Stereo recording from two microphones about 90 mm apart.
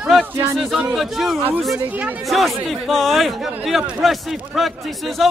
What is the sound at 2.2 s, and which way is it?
A man's voice, centre (ahead or behind).